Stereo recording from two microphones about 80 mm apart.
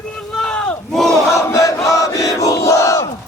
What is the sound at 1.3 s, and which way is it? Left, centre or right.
Battle cry, left.